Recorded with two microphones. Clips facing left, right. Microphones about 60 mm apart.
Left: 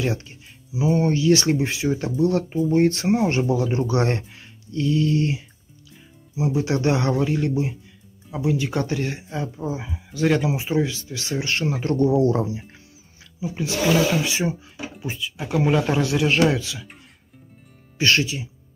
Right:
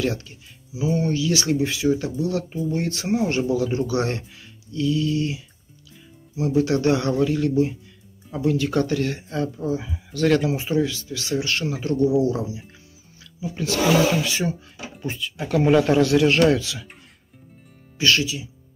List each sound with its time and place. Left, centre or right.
0.0 s speech: left
6.3 s speech: left
8.3 s speech: centre; by 12.6 s left
13.4 s speech: centre
15.0 s speech: centre
17.9 s speech: left